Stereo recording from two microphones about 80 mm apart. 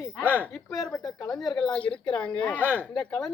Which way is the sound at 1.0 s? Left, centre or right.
Left.